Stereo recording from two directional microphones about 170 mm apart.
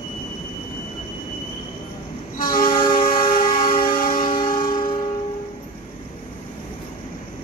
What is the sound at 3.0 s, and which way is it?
Music, 55° left (ahead or behind).